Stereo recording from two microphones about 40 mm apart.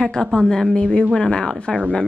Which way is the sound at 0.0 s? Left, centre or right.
Centre.